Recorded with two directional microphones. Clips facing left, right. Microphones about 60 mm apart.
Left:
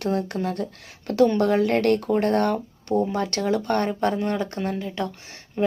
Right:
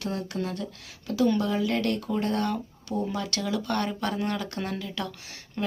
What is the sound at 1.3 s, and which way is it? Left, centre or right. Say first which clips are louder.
Speech: left 6 dB; left.